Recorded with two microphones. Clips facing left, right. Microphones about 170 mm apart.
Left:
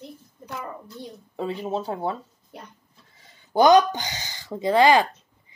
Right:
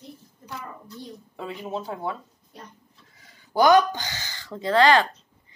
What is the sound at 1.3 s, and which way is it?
Speech, 35° left (ahead or behind).